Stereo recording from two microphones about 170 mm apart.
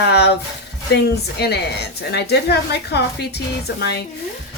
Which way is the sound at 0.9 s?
70° left (ahead or behind).